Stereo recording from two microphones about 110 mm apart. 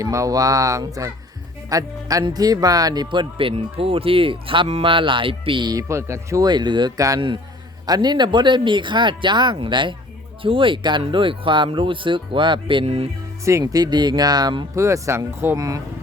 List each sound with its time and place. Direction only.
0.0 s speech: 30° right (ahead or behind)
5.9 s speech: 25° right (ahead or behind); by 12.8 s 50° right (ahead or behind)
12.8 s speech: 70° right (ahead or behind)
13.4 s speech: 30° right (ahead or behind)
14.8 s speech: 25° right (ahead or behind)